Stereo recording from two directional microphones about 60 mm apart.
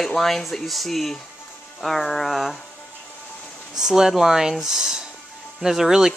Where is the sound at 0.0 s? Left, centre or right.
Centre.